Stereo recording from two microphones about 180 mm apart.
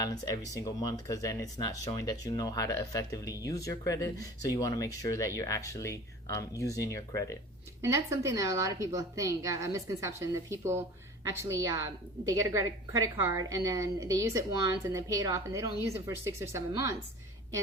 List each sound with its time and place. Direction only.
0.0 s speech: 20° left (ahead or behind)
7.8 s a woman's voice: 15° right (ahead or behind)